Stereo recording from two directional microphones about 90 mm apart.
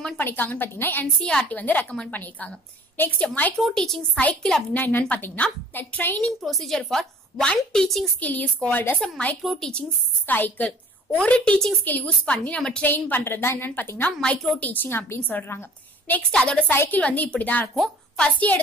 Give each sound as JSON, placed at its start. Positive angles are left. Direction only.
{"t": 0.2, "sound": "a woman's voice", "side_deg": 20}
{"t": 1.2, "sound": "a woman's voice", "side_deg": 10}
{"t": 3.5, "sound": "a woman's voice", "side_deg": 5}
{"t": 4.7, "sound": "a woman's voice", "side_deg": 20}
{"t": 6.2, "sound": "a woman's voice", "side_deg": 5}
{"t": 8.2, "sound": "a woman's voice", "side_deg": 15}
{"t": 9.4, "sound": "a woman's voice", "side_deg": 0}
{"t": 9.7, "sound": "a woman's voice", "side_deg": 15}
{"t": 16.7, "sound": "a woman's voice", "side_deg": 25}
{"t": 17.0, "sound": "a woman's voice", "side_deg": 15}
{"t": 17.7, "sound": "a sound", "side_deg": 0}
{"t": 18.2, "sound": "a woman's voice", "side_deg": 15}